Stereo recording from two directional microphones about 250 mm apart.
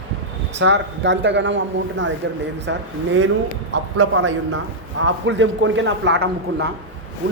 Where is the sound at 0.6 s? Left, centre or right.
Right.